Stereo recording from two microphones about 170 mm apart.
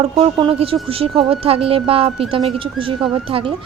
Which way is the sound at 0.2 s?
30° right (ahead or behind).